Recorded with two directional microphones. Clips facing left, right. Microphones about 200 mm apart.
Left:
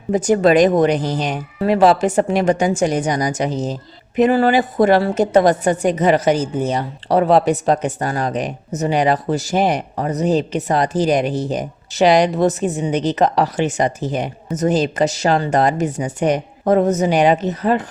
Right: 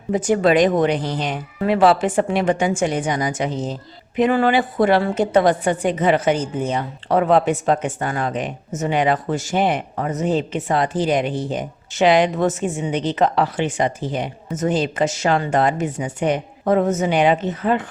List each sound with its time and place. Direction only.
0.1 s a woman's voice: 40° left (ahead or behind)